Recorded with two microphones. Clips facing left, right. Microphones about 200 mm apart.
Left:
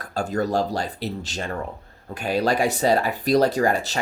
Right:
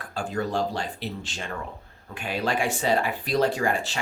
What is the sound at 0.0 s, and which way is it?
Speech, 40° left (ahead or behind).